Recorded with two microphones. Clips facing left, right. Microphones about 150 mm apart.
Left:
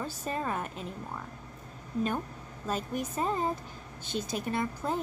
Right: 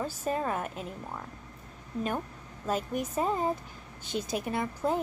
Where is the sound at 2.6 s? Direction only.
10° right (ahead or behind).